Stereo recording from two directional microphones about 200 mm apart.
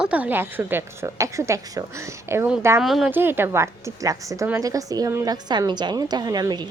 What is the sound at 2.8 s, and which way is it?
A woman's voice, centre (ahead or behind).